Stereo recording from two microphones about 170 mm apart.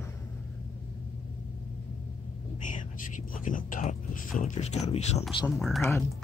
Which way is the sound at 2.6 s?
50° left (ahead or behind).